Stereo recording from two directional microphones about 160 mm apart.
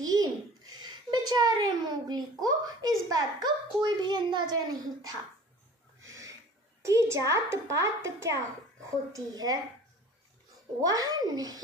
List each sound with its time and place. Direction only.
0.0 s a sound: 25° right (ahead or behind)
6.8 s a woman's voice: 20° right (ahead or behind)
10.8 s a child's voice: 25° right (ahead or behind)